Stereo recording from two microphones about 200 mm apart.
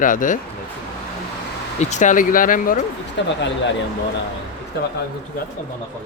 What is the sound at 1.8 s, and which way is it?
Speech, 35° left (ahead or behind).